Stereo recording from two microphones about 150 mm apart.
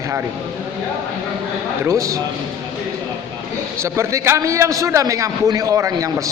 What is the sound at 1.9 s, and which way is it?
Speech, 20° right (ahead or behind).